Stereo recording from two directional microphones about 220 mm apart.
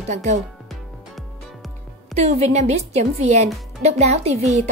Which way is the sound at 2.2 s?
30° right (ahead or behind).